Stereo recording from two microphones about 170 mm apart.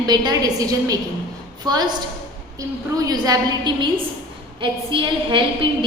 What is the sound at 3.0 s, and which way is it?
A woman's voice, 20° right (ahead or behind).